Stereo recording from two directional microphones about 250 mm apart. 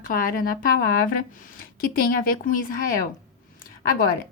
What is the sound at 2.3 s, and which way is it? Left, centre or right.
Speech, left.